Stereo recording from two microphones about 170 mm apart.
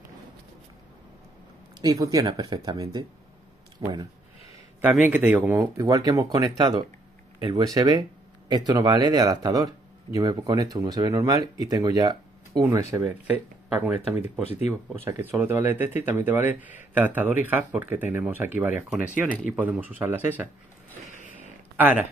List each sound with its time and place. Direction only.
1.8 s speech: 20° right (ahead or behind)
4.8 s speech: 10° right (ahead or behind)
21.7 s speech: 10° right (ahead or behind)